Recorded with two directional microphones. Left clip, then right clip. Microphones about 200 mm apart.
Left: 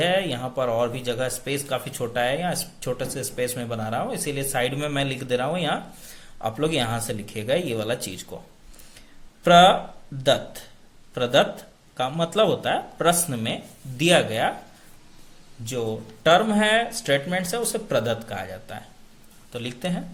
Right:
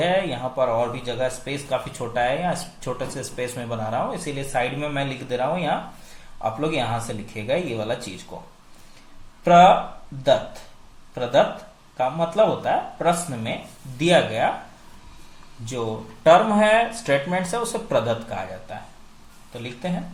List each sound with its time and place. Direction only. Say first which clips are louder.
0.0 s speech: right 1 dB; 25° left (ahead or behind)
11.1 s speech: right 1 dB; 30° left (ahead or behind)
15.7 s speech: even; 25° left (ahead or behind)